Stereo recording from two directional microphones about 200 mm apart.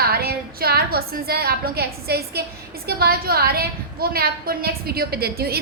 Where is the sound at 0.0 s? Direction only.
50° right (ahead or behind).